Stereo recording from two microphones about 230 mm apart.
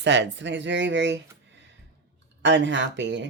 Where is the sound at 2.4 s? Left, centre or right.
Right.